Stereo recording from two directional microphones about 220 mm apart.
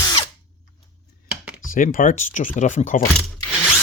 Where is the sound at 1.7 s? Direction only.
40° left (ahead or behind).